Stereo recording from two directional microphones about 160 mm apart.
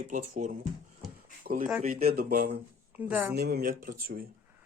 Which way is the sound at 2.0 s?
65° right (ahead or behind).